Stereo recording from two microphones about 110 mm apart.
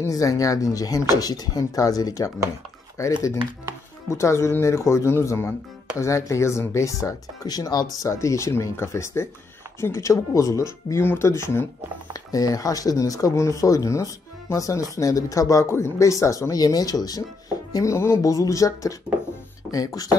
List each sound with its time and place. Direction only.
0.0 s speech: 30° left (ahead or behind)